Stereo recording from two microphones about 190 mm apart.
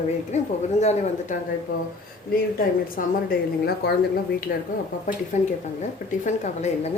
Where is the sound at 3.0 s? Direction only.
50° left (ahead or behind).